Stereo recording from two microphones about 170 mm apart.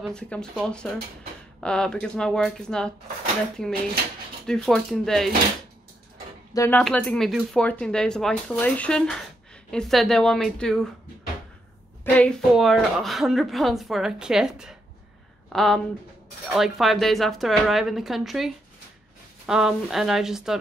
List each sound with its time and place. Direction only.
0.0 s speech: 5° left (ahead or behind)
4.5 s speech: centre (ahead or behind)
6.5 s speech: 15° left (ahead or behind)
6.8 s speech: 5° left (ahead or behind)
12.0 s speech: 5° left (ahead or behind)